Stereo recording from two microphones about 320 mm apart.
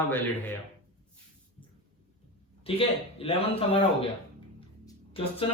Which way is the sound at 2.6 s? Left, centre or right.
Centre.